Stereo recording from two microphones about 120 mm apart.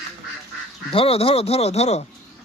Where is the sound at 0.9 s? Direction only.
55° left (ahead or behind).